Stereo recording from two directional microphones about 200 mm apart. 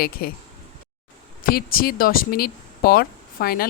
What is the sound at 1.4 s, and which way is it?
Speech, 50° left (ahead or behind).